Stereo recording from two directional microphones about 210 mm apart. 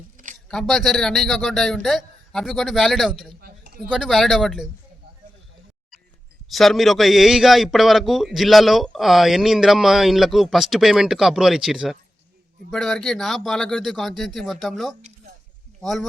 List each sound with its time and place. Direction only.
0.4 s a man's voice: centre (ahead or behind)
3.4 s a sound: 45° right (ahead or behind)
3.8 s a man's voice: centre (ahead or behind)
6.5 s a man's voice: centre (ahead or behind)